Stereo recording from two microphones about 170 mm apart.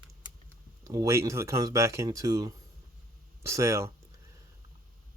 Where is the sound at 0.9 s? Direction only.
20° right (ahead or behind).